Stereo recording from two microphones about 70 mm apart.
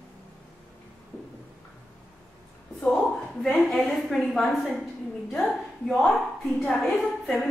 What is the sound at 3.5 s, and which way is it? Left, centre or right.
A woman's voice, centre.